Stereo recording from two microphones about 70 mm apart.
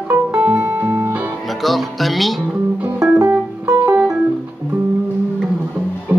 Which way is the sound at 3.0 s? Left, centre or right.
Centre.